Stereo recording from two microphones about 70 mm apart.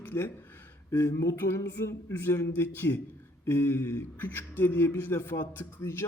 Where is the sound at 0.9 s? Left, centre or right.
Left.